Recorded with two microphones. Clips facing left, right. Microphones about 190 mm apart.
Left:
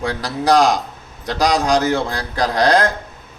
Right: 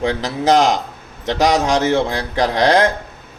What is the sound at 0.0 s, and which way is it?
Speech, 20° right (ahead or behind).